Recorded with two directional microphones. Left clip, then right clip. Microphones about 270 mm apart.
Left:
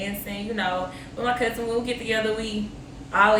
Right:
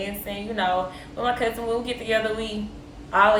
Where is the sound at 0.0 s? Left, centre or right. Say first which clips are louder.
Right 1 dB; centre.